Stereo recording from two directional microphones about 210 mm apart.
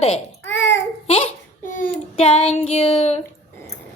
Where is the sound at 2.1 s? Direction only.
30° left (ahead or behind).